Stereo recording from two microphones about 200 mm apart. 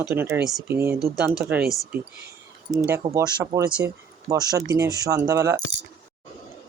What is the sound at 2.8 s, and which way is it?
Speech, 15° right (ahead or behind).